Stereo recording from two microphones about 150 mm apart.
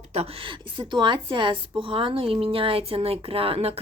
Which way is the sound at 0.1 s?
40° right (ahead or behind).